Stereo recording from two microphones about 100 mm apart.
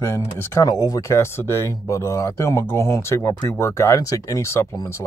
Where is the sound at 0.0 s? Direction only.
25° left (ahead or behind).